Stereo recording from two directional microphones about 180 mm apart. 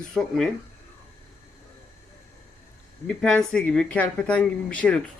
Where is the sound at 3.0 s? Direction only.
5° left (ahead or behind).